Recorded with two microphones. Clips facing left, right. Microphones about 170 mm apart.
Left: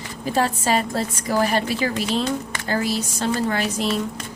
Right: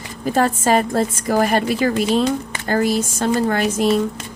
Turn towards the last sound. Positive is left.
turn(degrees=-50)  # may be behind; listen again after turning